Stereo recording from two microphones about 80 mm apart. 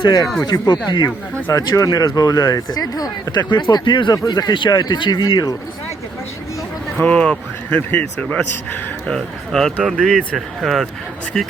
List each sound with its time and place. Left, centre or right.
0.0 s speech: left
1.7 s speech: left
3.5 s speech: left
4.1 s speech: left
7.0 s speech: centre